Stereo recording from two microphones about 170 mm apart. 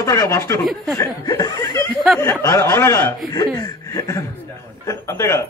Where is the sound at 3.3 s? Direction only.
20° left (ahead or behind).